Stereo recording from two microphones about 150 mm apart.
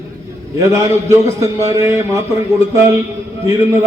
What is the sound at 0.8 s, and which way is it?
A man's voice, 20° right (ahead or behind).